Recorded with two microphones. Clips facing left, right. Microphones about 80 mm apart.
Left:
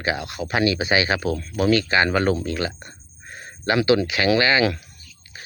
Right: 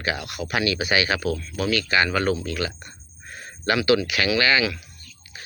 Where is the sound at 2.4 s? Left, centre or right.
Left.